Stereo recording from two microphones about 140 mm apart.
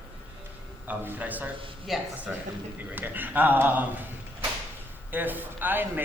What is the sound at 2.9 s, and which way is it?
Speech, 15° right (ahead or behind).